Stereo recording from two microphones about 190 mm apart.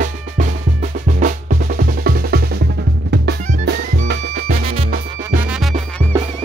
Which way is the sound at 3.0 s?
60° right (ahead or behind).